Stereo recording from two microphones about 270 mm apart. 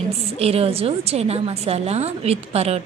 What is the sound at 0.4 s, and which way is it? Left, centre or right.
A woman's voice, right.